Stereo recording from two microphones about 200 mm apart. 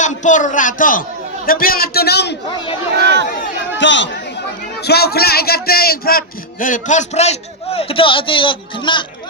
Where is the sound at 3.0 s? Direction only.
60° right (ahead or behind).